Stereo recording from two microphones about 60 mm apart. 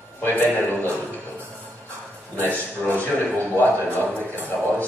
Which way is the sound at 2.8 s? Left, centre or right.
Left.